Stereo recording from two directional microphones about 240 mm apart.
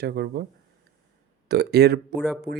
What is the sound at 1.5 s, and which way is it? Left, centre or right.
Speech, right.